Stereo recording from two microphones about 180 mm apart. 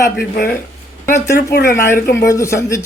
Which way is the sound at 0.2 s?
55° left (ahead or behind).